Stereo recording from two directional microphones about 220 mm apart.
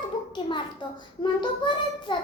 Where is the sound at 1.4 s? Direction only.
20° left (ahead or behind).